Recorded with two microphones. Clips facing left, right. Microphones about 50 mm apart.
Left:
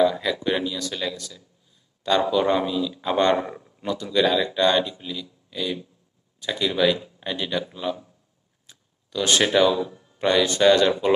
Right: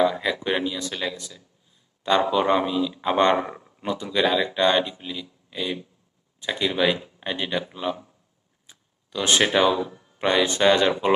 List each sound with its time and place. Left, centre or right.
0.0 s speech: centre